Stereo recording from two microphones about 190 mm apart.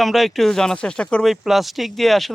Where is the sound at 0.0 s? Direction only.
Centre (ahead or behind).